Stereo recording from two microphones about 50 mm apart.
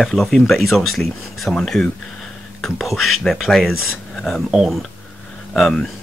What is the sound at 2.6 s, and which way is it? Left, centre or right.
Speech, centre.